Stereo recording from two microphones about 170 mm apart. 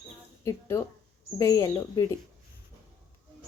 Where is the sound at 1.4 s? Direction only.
20° left (ahead or behind).